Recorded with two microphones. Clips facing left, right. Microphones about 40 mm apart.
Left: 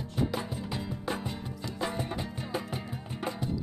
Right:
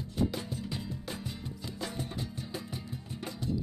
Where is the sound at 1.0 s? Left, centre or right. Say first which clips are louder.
Left 6 dB; left.